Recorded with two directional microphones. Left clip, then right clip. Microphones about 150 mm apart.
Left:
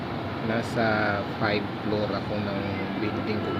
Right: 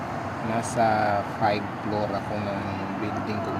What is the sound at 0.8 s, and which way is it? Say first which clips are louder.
Speech: right 4 dB; 15° right (ahead or behind).